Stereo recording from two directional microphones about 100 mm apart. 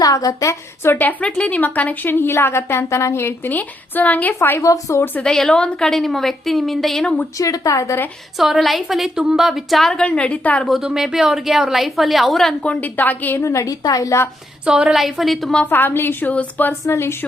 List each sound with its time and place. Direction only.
0.0 s a woman's voice: 35° left (ahead or behind)
4.6 s a woman's voice: 35° left (ahead or behind)
5.2 s a woman's voice: 5° left (ahead or behind)
7.3 s a woman's voice: 35° left (ahead or behind)
8.4 s a woman's voice: centre (ahead or behind); by 10.7 s 15° left (ahead or behind)
10.7 s a woman's voice: 5° right (ahead or behind); by 13.4 s 20° left (ahead or behind)
13.4 s a woman's voice: 30° left (ahead or behind)
14.6 s a woman's voice: 10° right (ahead or behind)
15.7 s a woman's voice: 20° left (ahead or behind)
16.8 s a woman's voice: 25° left (ahead or behind)